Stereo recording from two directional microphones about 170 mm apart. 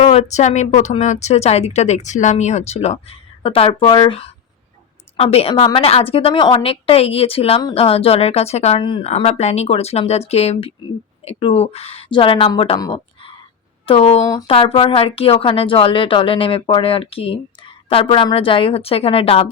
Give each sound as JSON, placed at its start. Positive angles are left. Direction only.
{"t": 0.0, "sound": "speech", "side_deg": 40}